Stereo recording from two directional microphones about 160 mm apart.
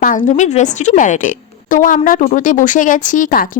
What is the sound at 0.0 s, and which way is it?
A woman's voice, 50° left (ahead or behind).